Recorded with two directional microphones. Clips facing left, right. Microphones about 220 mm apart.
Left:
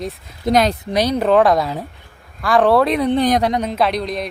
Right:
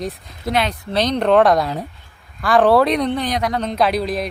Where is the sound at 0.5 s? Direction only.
40° left (ahead or behind).